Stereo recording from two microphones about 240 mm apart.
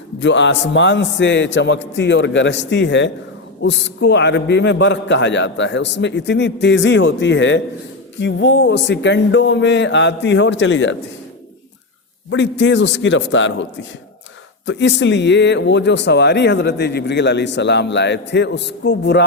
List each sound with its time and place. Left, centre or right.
0.2 s speech: left
12.3 s speech: left
14.7 s speech: left